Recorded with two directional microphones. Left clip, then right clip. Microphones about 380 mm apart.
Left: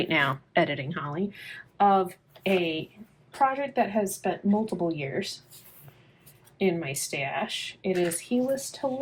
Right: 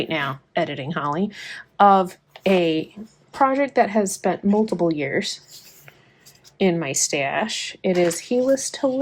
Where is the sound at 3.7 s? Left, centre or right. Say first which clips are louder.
Right 7 dB; right.